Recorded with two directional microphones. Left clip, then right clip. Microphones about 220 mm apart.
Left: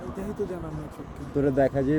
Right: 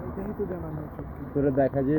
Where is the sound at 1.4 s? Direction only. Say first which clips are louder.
Left 1 dB; 5° left (ahead or behind).